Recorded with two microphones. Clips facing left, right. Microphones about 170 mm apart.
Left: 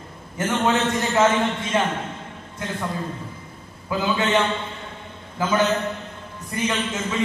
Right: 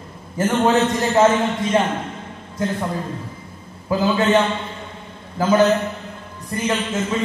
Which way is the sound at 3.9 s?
35° right (ahead or behind).